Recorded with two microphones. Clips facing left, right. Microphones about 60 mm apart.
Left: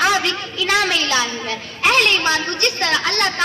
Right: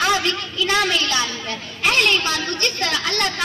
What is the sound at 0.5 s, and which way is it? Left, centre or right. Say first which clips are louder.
Speech: left 2 dB; left.